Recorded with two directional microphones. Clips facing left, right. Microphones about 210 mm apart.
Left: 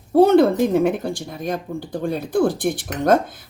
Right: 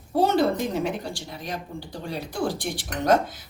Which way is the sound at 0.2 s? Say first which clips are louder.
Left 8 dB; 55° left (ahead or behind).